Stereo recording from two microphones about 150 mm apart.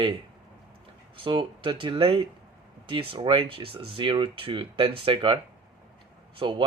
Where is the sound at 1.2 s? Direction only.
35° right (ahead or behind).